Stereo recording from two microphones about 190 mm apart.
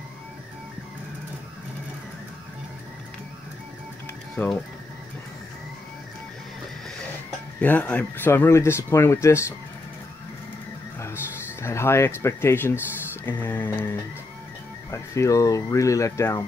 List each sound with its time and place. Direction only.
4.4 s speech: 10° left (ahead or behind)
7.6 s speech: 10° left (ahead or behind)
11.6 s speech: 15° left (ahead or behind)
14.9 s speech: 15° left (ahead or behind)